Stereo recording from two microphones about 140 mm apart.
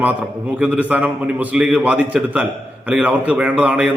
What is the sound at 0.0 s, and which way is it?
A man's voice, 10° right (ahead or behind).